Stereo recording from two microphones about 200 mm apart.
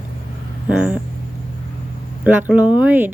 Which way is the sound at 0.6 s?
5° right (ahead or behind).